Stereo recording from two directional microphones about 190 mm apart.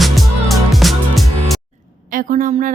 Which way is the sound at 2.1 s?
45° right (ahead or behind).